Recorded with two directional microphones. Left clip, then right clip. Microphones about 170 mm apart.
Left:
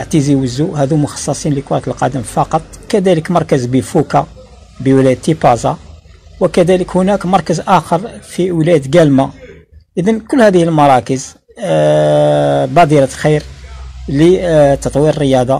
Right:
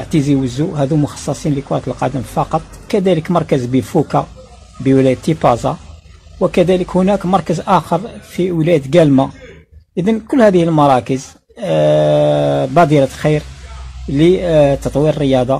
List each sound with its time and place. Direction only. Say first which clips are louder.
0.0 s speech: left 2 dB; 20° right (ahead or behind)